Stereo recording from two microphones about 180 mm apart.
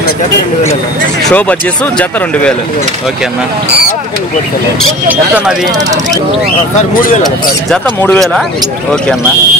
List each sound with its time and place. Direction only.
1.2 s speech: 5° left (ahead or behind)
5.0 s speech: 10° right (ahead or behind)
7.7 s speech: 5° left (ahead or behind)